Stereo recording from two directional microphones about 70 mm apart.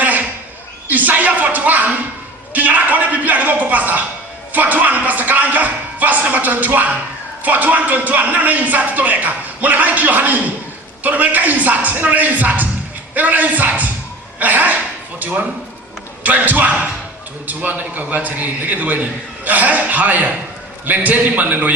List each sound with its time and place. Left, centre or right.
0.9 s a man's voice: right